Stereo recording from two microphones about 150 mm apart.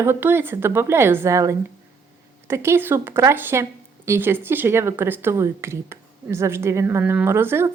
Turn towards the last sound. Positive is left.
turn(degrees=-15)  # may be behind; listen again after turning